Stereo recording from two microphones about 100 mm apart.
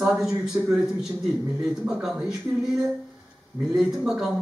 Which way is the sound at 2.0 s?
5° right (ahead or behind).